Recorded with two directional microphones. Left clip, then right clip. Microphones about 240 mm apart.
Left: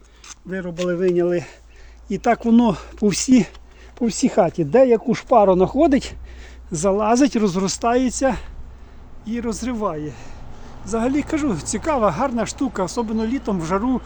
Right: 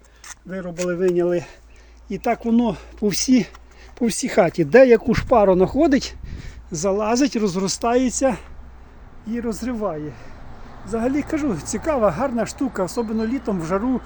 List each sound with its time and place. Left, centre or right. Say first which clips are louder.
0.5 s speech: left 2 dB; centre
2.0 s speech: left 3 dB; centre
3.9 s speech: even; centre